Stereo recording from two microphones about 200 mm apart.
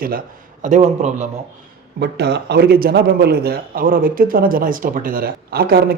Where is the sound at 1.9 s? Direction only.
55° right (ahead or behind).